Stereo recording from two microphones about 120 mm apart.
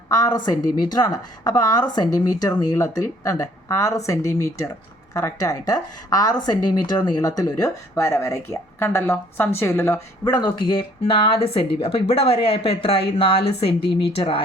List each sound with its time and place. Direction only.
0.1 s a woman's voice: 35° left (ahead or behind)
10.2 s speech: 35° left (ahead or behind)